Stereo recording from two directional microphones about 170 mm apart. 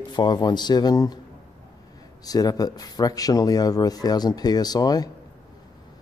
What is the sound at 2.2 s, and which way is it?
Speech, 20° left (ahead or behind).